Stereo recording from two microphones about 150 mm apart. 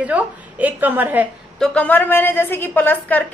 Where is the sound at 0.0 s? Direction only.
10° right (ahead or behind).